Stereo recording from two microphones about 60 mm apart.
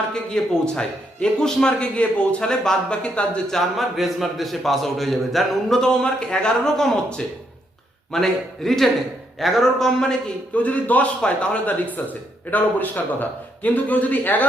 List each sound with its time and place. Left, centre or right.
0.1 s a man's voice: centre
3.5 s a man's voice: centre
10.5 s a man's voice: left